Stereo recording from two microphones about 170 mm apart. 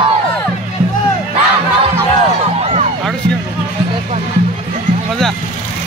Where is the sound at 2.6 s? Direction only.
40° right (ahead or behind).